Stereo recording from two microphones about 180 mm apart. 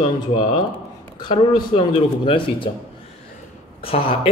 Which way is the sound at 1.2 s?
25° left (ahead or behind).